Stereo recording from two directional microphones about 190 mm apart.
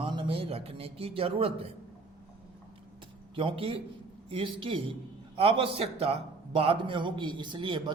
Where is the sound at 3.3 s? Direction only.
30° right (ahead or behind).